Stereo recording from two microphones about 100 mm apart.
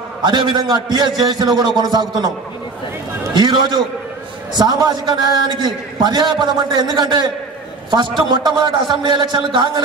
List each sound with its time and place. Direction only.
0.2 s a man's voice: 50° right (ahead or behind)
3.3 s a man's voice: 45° right (ahead or behind)